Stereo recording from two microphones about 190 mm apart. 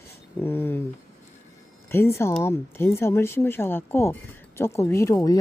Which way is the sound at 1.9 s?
15° left (ahead or behind).